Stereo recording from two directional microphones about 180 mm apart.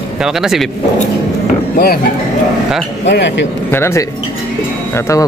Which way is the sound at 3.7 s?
15° left (ahead or behind).